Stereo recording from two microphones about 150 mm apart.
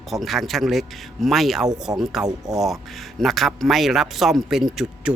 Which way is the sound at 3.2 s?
Centre (ahead or behind).